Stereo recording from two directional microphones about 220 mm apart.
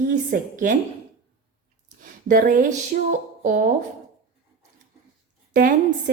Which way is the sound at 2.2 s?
40° right (ahead or behind).